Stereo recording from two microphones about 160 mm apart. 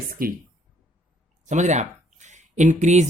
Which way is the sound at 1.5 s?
50° right (ahead or behind).